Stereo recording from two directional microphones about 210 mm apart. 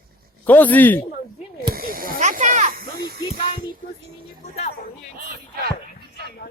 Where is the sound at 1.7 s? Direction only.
45° right (ahead or behind).